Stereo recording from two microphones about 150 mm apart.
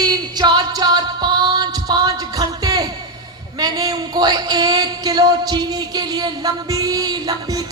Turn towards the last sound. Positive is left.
turn(degrees=-25)  # may be behind; listen again after turning